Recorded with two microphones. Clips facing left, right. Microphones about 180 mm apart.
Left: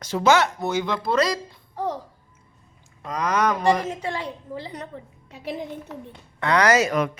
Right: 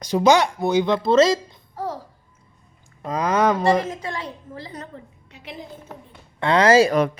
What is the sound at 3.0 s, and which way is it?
Speech, 30° right (ahead or behind).